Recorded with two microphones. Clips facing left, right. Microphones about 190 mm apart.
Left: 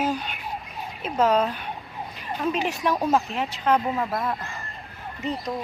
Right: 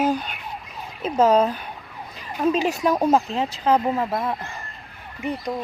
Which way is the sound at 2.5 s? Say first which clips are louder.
Right 3 dB; 20° right (ahead or behind).